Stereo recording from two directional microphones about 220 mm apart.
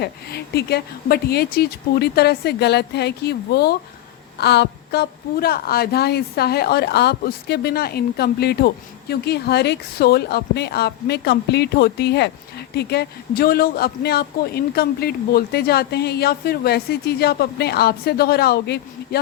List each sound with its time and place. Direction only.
0.0 s a woman's voice: 45° left (ahead or behind)